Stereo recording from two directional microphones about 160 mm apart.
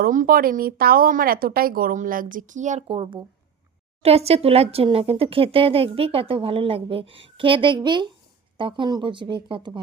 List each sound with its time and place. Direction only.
0.0 s speech: 60° right (ahead or behind); by 9.8 s 30° right (ahead or behind)